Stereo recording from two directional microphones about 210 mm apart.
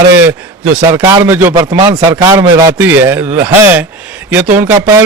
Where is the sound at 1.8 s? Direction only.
20° right (ahead or behind).